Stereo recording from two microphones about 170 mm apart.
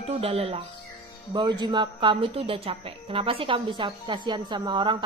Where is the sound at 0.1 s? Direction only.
35° right (ahead or behind).